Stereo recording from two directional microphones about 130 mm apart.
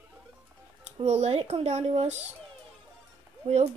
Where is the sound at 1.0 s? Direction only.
60° right (ahead or behind).